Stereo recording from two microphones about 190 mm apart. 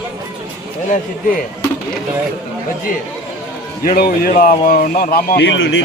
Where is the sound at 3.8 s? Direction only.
50° left (ahead or behind).